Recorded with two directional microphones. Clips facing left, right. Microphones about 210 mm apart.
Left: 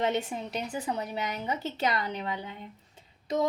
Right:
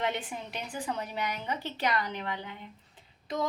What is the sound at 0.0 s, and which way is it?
A woman's voice, 25° left (ahead or behind).